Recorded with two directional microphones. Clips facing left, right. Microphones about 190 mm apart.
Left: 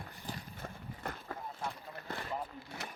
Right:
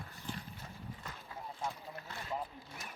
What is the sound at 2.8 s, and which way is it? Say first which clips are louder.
Vehicle: left 5 dB; 70° left (ahead or behind).